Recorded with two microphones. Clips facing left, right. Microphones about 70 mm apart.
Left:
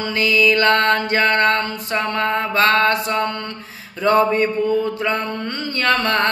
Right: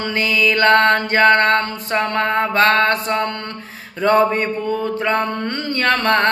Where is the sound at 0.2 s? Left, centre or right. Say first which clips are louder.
Left 1 dB; right.